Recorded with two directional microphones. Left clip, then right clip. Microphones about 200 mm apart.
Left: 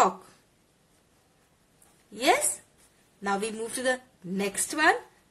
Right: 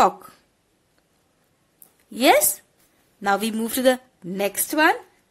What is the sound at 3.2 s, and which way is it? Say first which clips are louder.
A woman's voice: right 7 dB; 50° right (ahead or behind).